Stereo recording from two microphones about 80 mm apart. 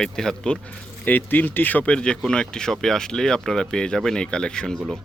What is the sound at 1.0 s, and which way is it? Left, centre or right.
Speech, left.